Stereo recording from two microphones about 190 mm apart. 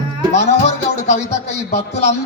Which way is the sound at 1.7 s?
35° left (ahead or behind).